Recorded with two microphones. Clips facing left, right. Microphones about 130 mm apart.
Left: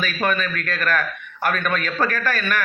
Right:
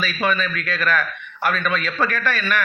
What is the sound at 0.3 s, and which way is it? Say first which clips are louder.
A man's voice: right 2 dB; 45° left (ahead or behind).